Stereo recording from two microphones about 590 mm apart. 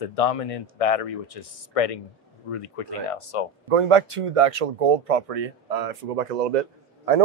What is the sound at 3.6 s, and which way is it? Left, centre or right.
Speech, right.